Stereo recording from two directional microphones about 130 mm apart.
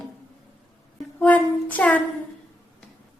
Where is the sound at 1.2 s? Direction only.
10° left (ahead or behind).